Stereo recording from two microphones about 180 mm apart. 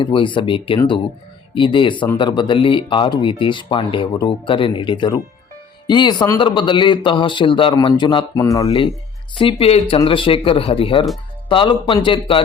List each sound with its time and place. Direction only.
0.0 s speech: 25° left (ahead or behind)